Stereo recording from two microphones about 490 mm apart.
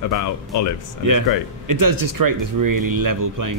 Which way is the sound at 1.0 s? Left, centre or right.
Right.